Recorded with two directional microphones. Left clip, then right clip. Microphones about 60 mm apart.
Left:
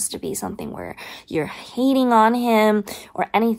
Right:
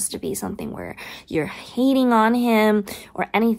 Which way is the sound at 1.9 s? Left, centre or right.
Centre.